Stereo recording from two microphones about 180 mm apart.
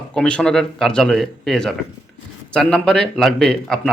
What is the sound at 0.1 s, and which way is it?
Speech, 5° left (ahead or behind).